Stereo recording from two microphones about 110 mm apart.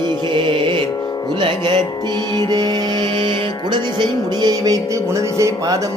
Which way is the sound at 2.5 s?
40° right (ahead or behind).